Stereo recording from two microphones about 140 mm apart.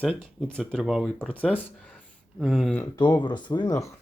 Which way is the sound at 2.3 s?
Centre (ahead or behind).